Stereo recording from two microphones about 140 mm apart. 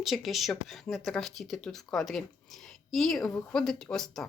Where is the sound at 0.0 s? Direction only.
Centre (ahead or behind).